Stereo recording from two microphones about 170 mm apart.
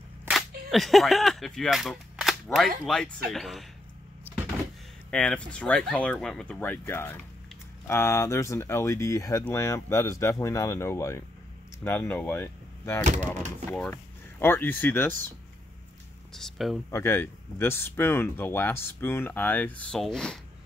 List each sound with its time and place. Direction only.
0.3 s speech: centre (ahead or behind)
5.1 s speech: 5° left (ahead or behind)
13.0 s speech: 45° right (ahead or behind)
13.7 s speech: 10° left (ahead or behind)
16.3 s speech: centre (ahead or behind)
16.9 s speech: 15° left (ahead or behind)